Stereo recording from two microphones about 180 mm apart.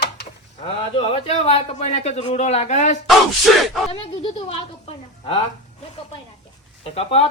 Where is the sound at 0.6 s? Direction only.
30° left (ahead or behind).